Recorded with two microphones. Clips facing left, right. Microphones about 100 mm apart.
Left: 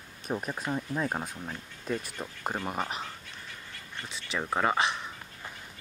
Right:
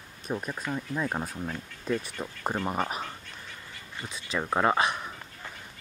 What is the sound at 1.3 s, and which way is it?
Speech, centre (ahead or behind).